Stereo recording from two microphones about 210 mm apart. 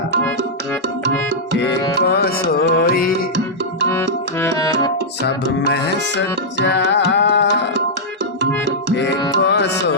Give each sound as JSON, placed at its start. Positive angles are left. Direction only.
{"t": 2.0, "sound": "music", "side_deg": 50}
{"t": 3.8, "sound": "music", "side_deg": 10}
{"t": 5.2, "sound": "music", "side_deg": 55}
{"t": 9.4, "sound": "music", "side_deg": 55}